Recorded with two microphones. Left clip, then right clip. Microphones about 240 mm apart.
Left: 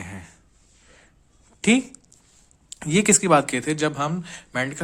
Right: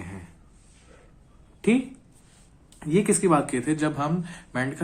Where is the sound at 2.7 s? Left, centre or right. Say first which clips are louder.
Left 3 dB; left.